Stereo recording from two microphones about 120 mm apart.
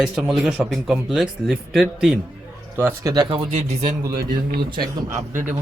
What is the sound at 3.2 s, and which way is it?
Speech, 50° right (ahead or behind).